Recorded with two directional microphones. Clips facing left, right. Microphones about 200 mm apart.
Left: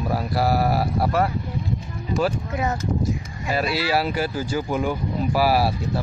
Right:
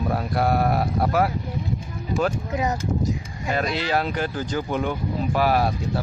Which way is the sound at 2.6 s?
15° right (ahead or behind).